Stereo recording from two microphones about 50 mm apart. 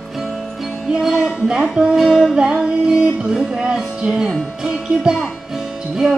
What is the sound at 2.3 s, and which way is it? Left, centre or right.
Music, centre.